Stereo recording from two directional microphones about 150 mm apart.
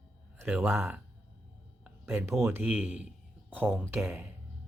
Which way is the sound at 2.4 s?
10° right (ahead or behind).